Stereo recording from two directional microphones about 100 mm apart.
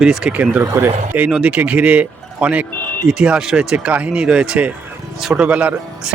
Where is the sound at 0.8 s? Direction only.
20° right (ahead or behind).